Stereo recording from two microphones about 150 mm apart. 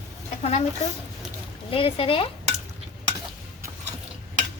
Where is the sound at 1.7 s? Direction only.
35° left (ahead or behind).